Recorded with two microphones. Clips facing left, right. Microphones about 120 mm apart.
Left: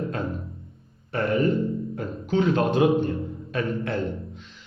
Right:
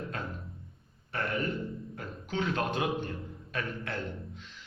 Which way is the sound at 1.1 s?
15° left (ahead or behind).